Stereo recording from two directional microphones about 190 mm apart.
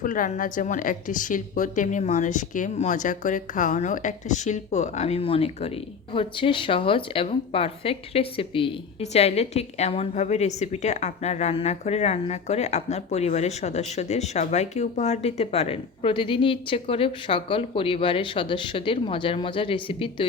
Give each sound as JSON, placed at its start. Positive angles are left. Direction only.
{"t": 0.0, "sound": "a woman's voice", "side_deg": 45}